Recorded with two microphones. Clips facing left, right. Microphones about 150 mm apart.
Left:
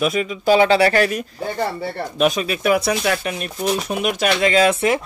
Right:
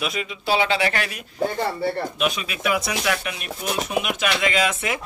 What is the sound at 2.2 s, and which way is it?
Speech, 40° left (ahead or behind).